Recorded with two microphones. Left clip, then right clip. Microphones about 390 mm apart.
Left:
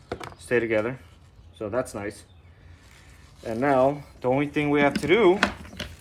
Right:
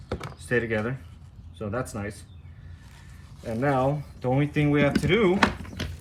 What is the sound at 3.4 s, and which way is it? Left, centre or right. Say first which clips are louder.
Speech: left 4 dB; centre.